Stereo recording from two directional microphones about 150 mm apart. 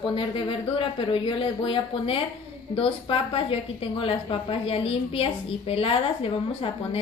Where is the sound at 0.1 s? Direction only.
35° left (ahead or behind).